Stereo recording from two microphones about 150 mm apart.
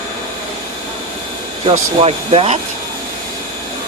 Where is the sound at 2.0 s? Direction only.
40° right (ahead or behind).